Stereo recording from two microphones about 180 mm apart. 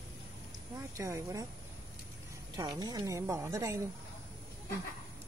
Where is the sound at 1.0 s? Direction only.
15° right (ahead or behind).